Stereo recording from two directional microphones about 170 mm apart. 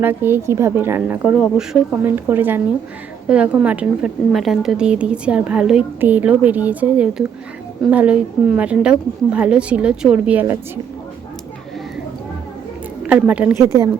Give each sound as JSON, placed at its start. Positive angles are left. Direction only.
{"t": 0.0, "sound": "a woman's voice", "side_deg": -10}
{"t": 13.0, "sound": "a woman's voice", "side_deg": -10}